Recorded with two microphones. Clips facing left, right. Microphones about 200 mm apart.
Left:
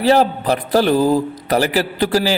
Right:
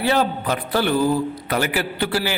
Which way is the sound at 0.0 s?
35° left (ahead or behind).